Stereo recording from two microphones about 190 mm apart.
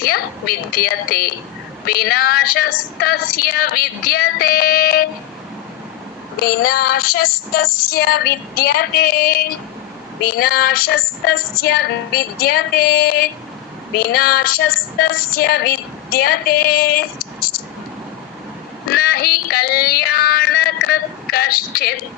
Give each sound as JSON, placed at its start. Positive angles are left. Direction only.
{"t": 0.0, "sound": "a woman's voice", "side_deg": 50}
{"t": 6.4, "sound": "speech", "side_deg": 50}
{"t": 18.9, "sound": "synthetic singing", "side_deg": 50}